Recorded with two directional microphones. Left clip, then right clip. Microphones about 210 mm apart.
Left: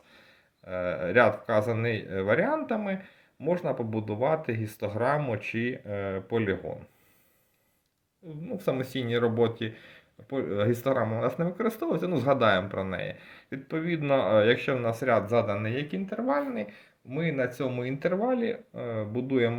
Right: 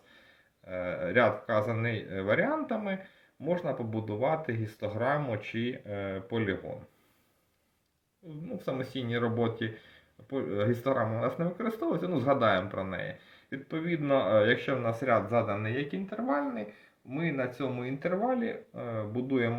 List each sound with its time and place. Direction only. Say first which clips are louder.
0.7 s speech: left 4 dB; 40° left (ahead or behind)
8.5 s speech: left 5 dB; 35° left (ahead or behind)